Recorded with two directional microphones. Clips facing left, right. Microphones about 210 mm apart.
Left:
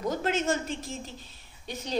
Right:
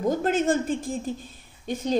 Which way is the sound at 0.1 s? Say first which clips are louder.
Right 5 dB; 50° right (ahead or behind).